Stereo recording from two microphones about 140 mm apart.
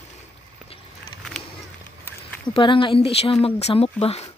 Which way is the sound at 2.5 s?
40° left (ahead or behind).